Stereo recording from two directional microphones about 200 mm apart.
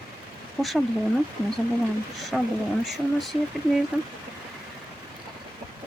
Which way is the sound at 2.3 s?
Centre (ahead or behind).